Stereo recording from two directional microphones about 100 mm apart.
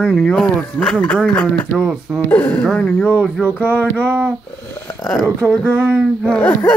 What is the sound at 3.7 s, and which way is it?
Speech, 15° left (ahead or behind).